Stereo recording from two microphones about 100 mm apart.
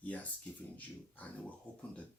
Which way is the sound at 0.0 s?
15° left (ahead or behind).